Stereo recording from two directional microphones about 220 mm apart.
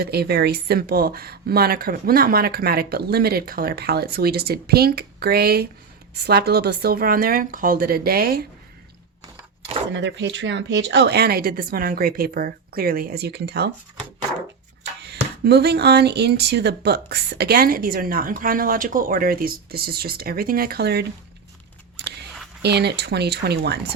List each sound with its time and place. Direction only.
0.0 s speech: 45° right (ahead or behind)
9.9 s speech: 55° right (ahead or behind)
15.4 s speech: 50° right (ahead or behind)
22.0 s biting: 50° right (ahead or behind)
22.6 s speech: 50° right (ahead or behind)